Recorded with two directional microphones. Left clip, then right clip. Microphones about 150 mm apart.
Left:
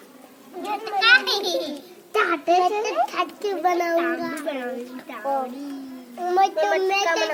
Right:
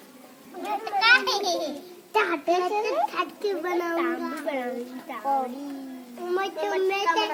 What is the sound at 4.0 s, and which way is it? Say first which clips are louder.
Speech: left 4 dB; centre (ahead or behind).